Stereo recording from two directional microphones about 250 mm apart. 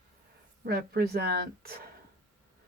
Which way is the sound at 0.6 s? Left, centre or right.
Right.